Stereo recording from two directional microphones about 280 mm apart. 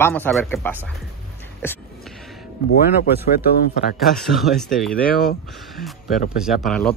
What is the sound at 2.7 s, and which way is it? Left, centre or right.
Speech, left.